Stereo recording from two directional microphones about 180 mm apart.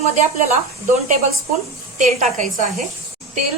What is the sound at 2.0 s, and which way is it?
Speech, 45° right (ahead or behind).